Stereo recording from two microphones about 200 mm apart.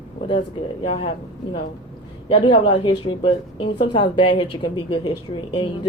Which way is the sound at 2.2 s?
25° left (ahead or behind).